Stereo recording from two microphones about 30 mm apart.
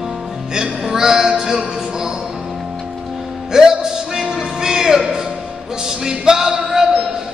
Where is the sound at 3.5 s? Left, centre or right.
Centre.